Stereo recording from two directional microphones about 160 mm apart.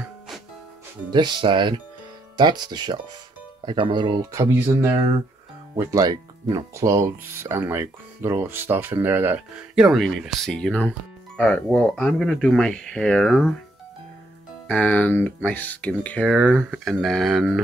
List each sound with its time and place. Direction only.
1.1 s speech: 30° right (ahead or behind); by 9.4 s 15° right (ahead or behind)
9.8 s speech: centre (ahead or behind)
14.7 s speech: 10° left (ahead or behind)